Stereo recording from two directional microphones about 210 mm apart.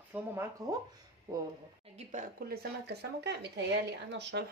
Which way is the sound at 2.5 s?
50° right (ahead or behind).